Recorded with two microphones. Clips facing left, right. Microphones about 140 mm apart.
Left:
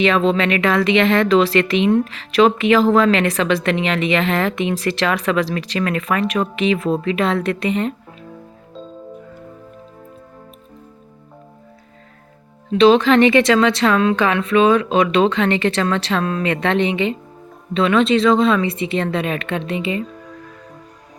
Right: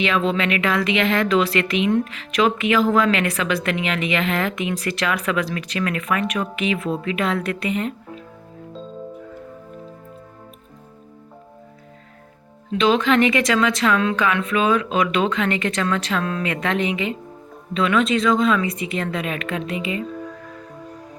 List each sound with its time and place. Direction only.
0.0 s speech: 35° left (ahead or behind)
12.7 s a woman's voice: 30° left (ahead or behind)